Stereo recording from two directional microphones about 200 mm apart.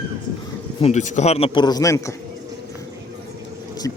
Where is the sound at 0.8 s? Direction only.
35° left (ahead or behind); by 2.1 s 15° left (ahead or behind).